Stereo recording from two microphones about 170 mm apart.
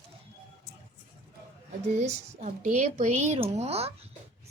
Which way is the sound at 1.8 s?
40° right (ahead or behind).